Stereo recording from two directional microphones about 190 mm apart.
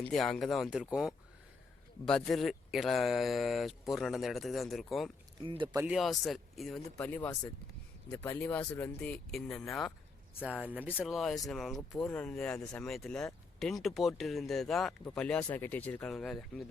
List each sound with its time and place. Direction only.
0.0 s speech: centre (ahead or behind)
5.4 s speech: 25° right (ahead or behind)
5.8 s speech: 5° right (ahead or behind)